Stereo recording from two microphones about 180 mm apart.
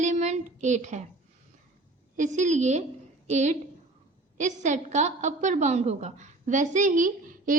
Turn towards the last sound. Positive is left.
turn(degrees=-50)  # may be behind; listen again after turning